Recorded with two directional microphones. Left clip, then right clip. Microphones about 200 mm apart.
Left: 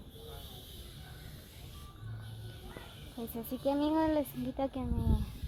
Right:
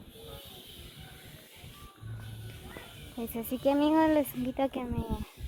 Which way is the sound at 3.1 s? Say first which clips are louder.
Right 5 dB; 20° right (ahead or behind).